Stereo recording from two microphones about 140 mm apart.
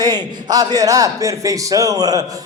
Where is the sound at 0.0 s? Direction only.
30° right (ahead or behind).